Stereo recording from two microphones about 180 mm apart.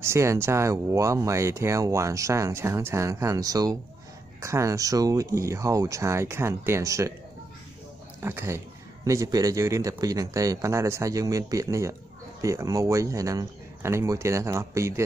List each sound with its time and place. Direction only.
0.0 s speech: 15° right (ahead or behind)
8.2 s speech: 10° right (ahead or behind)